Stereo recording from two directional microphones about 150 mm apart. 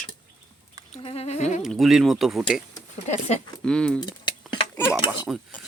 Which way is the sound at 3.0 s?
50° left (ahead or behind).